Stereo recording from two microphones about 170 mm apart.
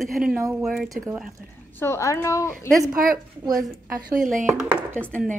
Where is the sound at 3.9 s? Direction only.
55° right (ahead or behind).